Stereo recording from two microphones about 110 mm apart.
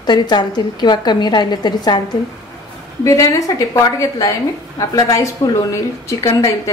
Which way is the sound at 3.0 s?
30° left (ahead or behind).